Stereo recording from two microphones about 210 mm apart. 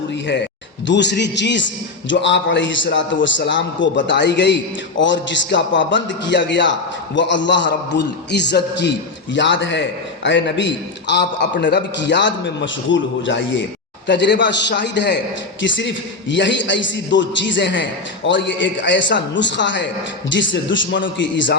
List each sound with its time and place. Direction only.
0.9 s a man's voice: 55° left (ahead or behind)